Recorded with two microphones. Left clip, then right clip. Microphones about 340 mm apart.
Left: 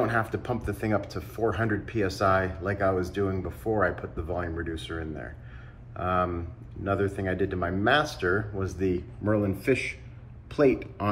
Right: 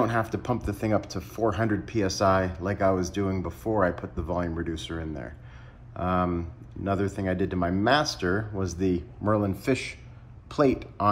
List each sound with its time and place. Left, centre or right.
0.0 s a man's voice: right